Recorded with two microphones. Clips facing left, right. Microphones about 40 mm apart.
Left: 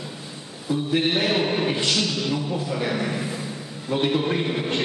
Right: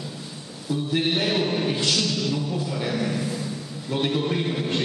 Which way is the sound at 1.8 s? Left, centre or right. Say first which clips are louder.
Left 1 dB; centre.